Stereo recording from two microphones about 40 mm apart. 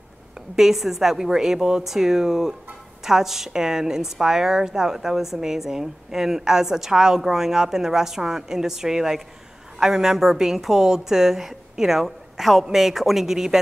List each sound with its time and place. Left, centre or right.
0.6 s a woman's voice: centre